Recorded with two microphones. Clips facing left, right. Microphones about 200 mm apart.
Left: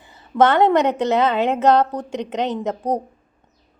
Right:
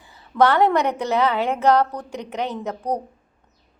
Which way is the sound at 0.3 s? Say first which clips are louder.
Left 2 dB; 20° left (ahead or behind).